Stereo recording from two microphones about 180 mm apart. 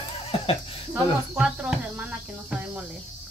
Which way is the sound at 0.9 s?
5° right (ahead or behind).